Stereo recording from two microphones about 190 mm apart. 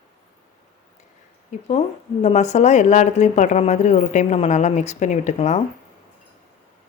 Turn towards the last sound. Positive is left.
turn(degrees=35)  # may be behind; listen again after turning